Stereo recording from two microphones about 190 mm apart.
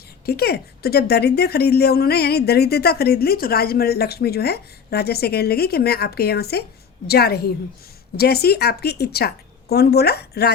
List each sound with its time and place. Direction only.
0.3 s a woman's voice: 55° left (ahead or behind)